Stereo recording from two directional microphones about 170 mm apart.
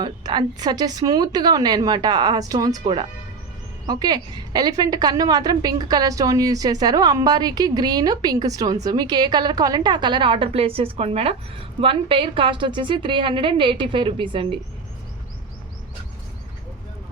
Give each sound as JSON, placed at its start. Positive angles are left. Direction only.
{"t": 0.0, "sound": "a woman's voice", "side_deg": -25}